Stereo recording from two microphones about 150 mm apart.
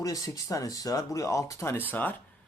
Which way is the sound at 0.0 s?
25° left (ahead or behind).